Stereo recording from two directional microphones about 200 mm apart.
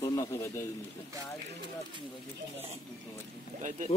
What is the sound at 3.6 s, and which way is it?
Speech, 35° right (ahead or behind).